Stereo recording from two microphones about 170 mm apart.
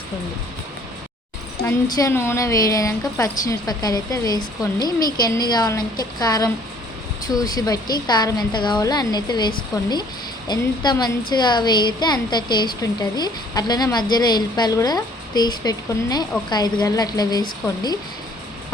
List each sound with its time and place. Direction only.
1.6 s a woman's voice: 15° left (ahead or behind)